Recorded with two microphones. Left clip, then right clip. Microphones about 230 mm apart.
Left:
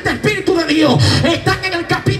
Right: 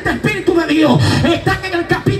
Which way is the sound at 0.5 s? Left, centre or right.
Left.